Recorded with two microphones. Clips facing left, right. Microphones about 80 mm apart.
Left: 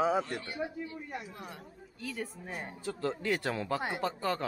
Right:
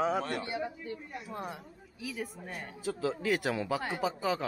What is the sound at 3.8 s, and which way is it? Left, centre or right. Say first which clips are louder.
Speech: even; centre.